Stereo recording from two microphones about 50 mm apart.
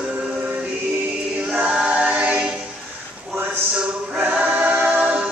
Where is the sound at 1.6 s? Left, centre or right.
Right.